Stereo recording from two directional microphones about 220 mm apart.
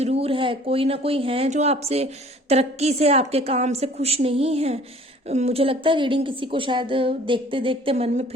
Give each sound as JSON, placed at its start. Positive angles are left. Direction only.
{"t": 0.0, "sound": "a woman's voice", "side_deg": -25}